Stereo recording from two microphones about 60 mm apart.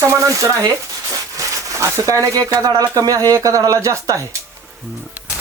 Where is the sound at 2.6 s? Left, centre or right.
Right.